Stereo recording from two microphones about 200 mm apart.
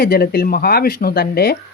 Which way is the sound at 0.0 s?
50° left (ahead or behind).